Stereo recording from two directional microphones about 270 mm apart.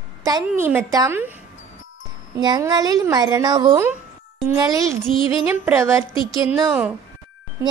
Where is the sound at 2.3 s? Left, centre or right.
Centre.